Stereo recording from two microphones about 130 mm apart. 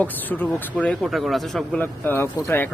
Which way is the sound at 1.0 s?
Centre (ahead or behind).